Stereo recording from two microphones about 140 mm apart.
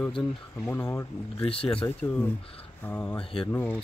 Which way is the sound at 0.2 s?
5° left (ahead or behind).